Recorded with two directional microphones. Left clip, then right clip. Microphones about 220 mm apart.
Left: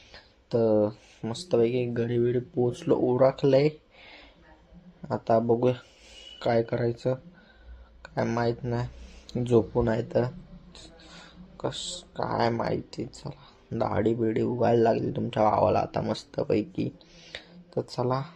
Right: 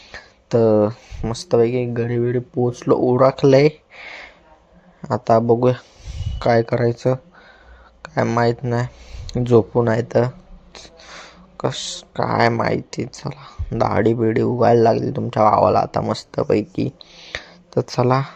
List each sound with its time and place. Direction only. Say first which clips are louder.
0.1 s speech: right 9 dB; 30° right (ahead or behind)